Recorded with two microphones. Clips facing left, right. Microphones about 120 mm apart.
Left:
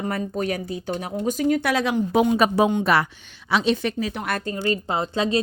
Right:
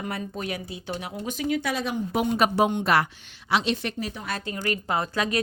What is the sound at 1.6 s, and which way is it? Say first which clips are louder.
Speech: left 6 dB; 80° left.